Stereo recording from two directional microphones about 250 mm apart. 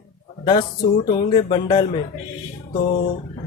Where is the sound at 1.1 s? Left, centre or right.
Left.